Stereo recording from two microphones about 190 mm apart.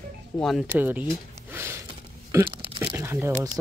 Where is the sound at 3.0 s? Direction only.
15° right (ahead or behind).